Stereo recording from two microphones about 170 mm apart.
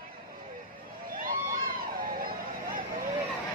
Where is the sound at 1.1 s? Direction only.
55° right (ahead or behind).